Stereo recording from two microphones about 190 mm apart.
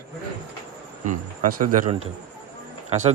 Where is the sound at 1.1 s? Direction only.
45° right (ahead or behind).